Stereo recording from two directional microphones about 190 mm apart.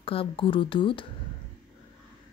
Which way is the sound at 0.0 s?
30° left (ahead or behind).